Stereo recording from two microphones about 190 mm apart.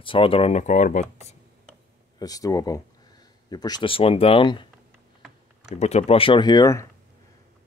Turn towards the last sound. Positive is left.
turn(degrees=15)  # may be behind; listen again after turning